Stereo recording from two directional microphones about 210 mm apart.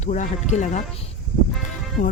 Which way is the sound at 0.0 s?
35° left (ahead or behind).